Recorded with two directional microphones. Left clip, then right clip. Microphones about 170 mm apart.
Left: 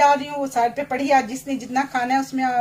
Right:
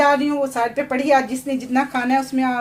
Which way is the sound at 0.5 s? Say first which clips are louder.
Even; 35° right (ahead or behind).